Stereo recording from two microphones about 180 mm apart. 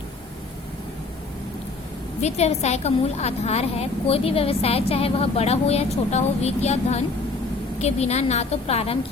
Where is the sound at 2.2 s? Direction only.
35° left (ahead or behind).